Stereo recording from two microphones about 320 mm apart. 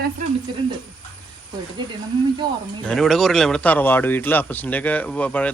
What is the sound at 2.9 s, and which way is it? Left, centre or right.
A man's voice, centre.